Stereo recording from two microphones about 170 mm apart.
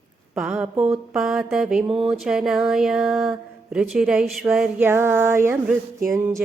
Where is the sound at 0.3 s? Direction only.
5° right (ahead or behind).